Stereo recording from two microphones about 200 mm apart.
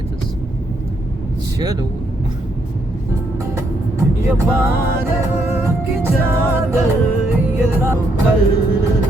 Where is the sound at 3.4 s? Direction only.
15° right (ahead or behind).